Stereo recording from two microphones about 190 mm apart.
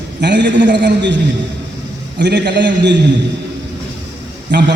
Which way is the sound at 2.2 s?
65° right (ahead or behind).